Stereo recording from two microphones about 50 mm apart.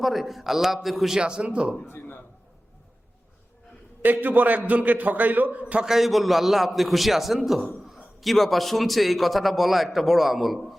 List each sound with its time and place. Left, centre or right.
0.0 s a man's voice: centre
1.2 s speech: centre
1.9 s a man's voice: left
4.0 s a man's voice: right
5.8 s a man's voice: centre